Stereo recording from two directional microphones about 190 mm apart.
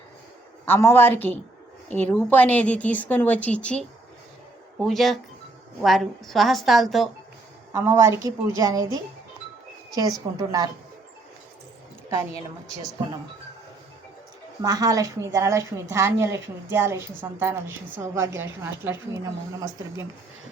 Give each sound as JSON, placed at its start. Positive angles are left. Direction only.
{"t": 0.6, "sound": "a woman's voice", "side_deg": 15}
{"t": 7.7, "sound": "a woman's voice", "side_deg": -10}
{"t": 9.9, "sound": "a woman's voice", "side_deg": -20}
{"t": 14.6, "sound": "a woman's voice", "side_deg": -20}